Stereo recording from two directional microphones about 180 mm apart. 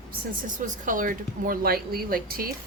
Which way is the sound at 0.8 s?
50° right (ahead or behind).